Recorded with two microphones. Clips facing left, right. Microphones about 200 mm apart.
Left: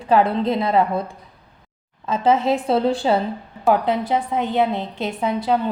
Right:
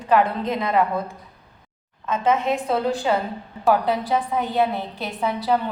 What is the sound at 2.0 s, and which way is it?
A woman's voice, 30° left (ahead or behind).